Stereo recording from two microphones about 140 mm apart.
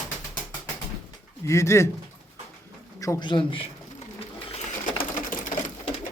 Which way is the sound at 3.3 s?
40° left (ahead or behind).